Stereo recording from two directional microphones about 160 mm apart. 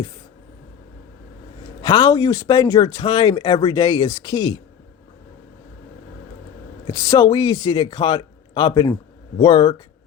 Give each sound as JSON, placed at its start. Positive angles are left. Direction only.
{"t": 1.8, "sound": "speech", "side_deg": 25}
{"t": 6.8, "sound": "speech", "side_deg": 20}